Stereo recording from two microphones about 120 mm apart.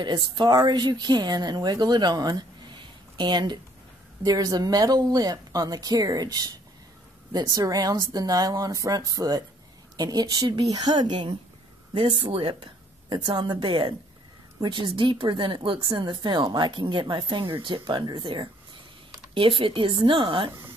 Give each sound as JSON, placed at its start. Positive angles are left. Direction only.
{"t": 0.0, "sound": "speech", "side_deg": -40}